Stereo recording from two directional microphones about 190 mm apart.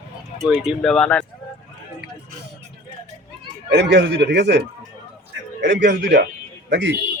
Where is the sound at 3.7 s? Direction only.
65° right (ahead or behind).